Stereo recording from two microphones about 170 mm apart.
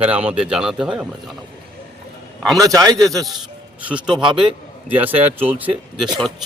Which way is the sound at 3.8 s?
5° right (ahead or behind).